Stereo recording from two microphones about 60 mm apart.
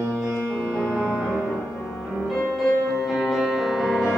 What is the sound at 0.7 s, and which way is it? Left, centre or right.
Music, left.